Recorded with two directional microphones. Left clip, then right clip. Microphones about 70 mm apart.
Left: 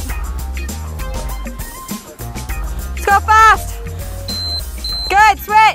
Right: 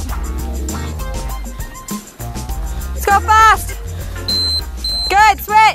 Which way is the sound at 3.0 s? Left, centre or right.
Centre.